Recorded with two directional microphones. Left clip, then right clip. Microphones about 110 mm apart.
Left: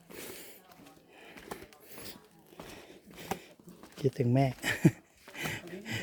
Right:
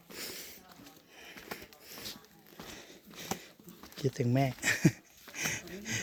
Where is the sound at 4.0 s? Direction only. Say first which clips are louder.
Left 2 dB; 30° left (ahead or behind).